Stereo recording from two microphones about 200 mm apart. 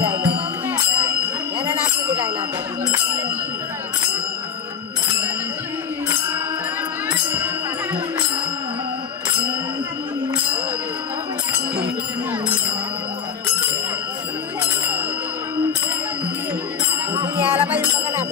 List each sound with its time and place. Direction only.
17.1 s music: 10° right (ahead or behind)